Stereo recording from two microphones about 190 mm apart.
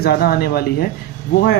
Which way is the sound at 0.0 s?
55° left (ahead or behind).